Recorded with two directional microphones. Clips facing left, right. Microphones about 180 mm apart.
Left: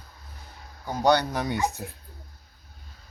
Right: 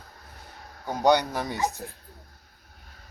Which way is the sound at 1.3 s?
5° right (ahead or behind).